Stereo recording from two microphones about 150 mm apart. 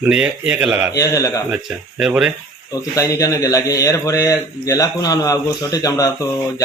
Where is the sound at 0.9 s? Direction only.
20° left (ahead or behind).